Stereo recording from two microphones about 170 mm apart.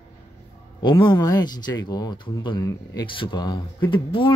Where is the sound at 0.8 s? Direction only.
25° left (ahead or behind).